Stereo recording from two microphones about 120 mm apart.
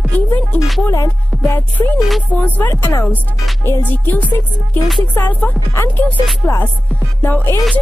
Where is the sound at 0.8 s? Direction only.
25° left (ahead or behind).